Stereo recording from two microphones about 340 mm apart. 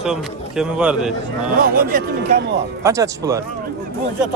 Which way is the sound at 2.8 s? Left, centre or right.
Centre.